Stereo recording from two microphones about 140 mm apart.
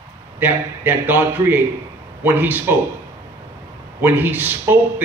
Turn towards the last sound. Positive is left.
turn(degrees=-15)  # may be behind; listen again after turning